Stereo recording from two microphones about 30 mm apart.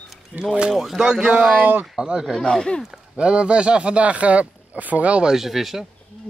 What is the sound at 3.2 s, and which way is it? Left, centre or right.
Speech, right.